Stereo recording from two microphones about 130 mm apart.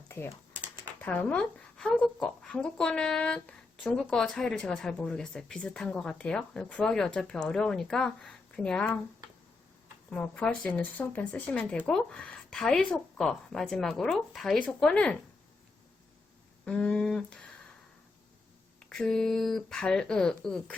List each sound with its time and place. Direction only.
0.1 s speech: 20° left (ahead or behind)
10.1 s speech: 10° left (ahead or behind)
16.6 s speech: 10° left (ahead or behind)
18.9 s speech: 5° left (ahead or behind)